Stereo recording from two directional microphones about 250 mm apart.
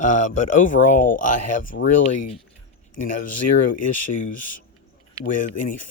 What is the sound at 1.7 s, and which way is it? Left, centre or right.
Speech, left.